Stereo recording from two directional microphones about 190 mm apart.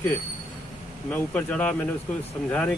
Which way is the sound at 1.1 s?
10° left (ahead or behind).